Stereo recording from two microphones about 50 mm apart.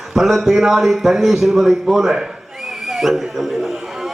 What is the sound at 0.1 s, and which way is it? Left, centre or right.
A man's voice, centre.